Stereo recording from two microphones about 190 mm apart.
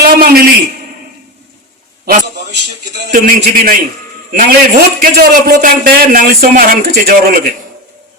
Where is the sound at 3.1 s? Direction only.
50° right (ahead or behind).